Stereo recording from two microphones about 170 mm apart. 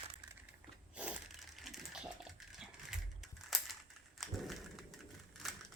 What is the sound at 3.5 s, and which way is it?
Crushing, centre (ahead or behind).